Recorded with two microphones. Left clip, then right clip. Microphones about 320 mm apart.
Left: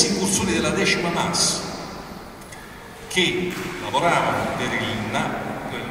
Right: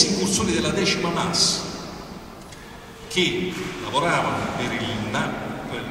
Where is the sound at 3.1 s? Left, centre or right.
Right.